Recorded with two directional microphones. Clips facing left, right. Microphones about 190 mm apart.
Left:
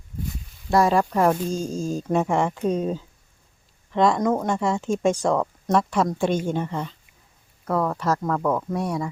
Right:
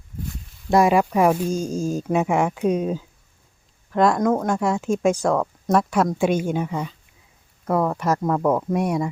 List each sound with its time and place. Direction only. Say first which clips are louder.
0.7 s speech: right 2 dB; 15° right (ahead or behind)